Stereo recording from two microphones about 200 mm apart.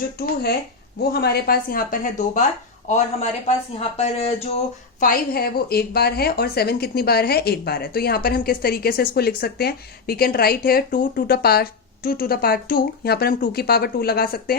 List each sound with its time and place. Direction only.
1.1 s speech: 50° left (ahead or behind); by 4.4 s 30° left (ahead or behind)
4.9 s a woman's voice: 45° left (ahead or behind)